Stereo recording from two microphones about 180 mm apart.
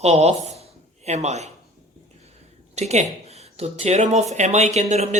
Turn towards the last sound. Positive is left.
turn(degrees=-40)  # may be behind; listen again after turning